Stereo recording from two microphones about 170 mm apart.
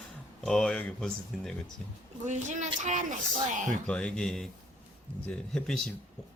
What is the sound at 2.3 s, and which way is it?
Speech, 45° right (ahead or behind).